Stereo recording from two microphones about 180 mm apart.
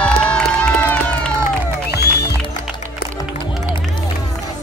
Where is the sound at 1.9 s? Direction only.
65° left (ahead or behind).